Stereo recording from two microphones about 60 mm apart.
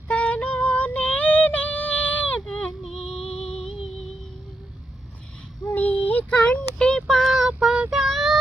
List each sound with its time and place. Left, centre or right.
0.1 s female singing: left
2.6 s a sound: centre
5.7 s child singing: left
7.1 s child singing: centre